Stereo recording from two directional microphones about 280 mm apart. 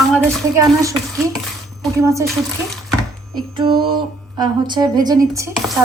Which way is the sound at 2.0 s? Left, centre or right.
Centre.